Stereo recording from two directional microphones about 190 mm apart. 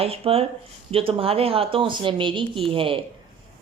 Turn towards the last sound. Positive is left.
turn(degrees=-30)  # may be behind; listen again after turning